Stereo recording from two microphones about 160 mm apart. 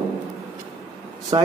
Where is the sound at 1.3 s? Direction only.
30° right (ahead or behind).